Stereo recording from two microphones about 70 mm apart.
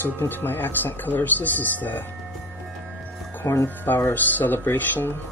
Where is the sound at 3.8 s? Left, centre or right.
Left.